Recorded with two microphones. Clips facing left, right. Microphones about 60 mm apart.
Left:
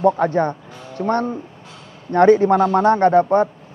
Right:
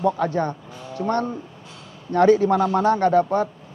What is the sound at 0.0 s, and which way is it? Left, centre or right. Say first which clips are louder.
Speech: left 5 dB; left.